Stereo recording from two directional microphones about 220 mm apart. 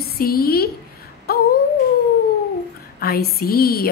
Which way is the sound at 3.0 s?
45° left (ahead or behind).